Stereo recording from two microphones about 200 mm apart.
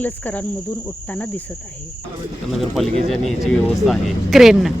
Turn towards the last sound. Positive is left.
turn(degrees=0)  # may be behind; listen again after turning